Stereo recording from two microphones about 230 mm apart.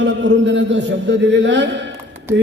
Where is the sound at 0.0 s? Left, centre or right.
Right.